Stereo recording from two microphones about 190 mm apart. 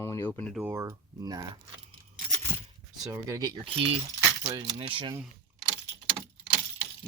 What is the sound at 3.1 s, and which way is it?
Speech, 20° right (ahead or behind).